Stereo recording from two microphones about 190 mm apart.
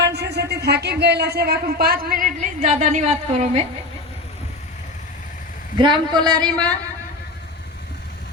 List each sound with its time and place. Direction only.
0.0 s speech: 60° right (ahead or behind); by 3.6 s 35° right (ahead or behind)
5.7 s a man's voice: 25° right (ahead or behind)